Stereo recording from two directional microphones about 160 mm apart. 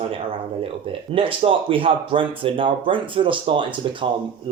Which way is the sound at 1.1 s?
35° right (ahead or behind).